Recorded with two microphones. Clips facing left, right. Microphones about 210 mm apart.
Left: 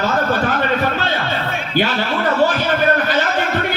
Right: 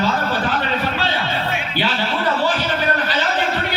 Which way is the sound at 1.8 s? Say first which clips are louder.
Left 6 dB; 45° left (ahead or behind).